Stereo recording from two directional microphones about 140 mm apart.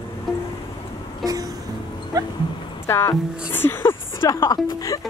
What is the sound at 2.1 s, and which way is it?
Dog, 25° right (ahead or behind).